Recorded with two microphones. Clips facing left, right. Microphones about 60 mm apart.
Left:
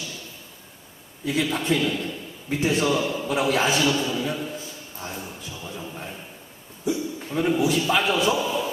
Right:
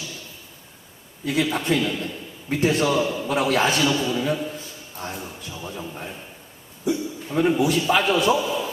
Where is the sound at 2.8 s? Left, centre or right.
Right.